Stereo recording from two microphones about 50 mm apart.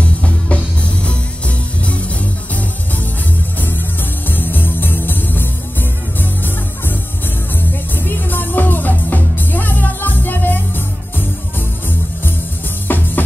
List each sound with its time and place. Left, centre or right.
0.0 s music: left
1.8 s music: left
3.5 s music: left
7.9 s music: left
12.8 s music: left